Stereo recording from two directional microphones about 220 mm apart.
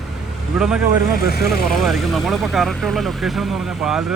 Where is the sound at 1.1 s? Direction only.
45° left (ahead or behind).